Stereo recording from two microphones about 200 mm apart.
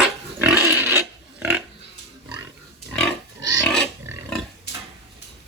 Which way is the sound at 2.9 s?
5° left (ahead or behind).